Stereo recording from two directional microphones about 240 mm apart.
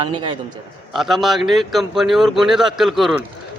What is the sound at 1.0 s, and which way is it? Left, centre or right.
A man's voice, centre.